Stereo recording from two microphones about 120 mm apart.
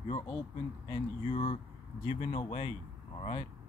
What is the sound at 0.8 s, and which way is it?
Speech, 45° left (ahead or behind).